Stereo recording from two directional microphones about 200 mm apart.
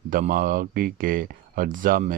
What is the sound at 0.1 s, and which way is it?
Speech, 45° right (ahead or behind).